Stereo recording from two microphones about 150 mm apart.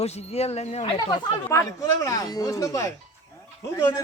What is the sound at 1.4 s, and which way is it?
Speech, 20° left (ahead or behind).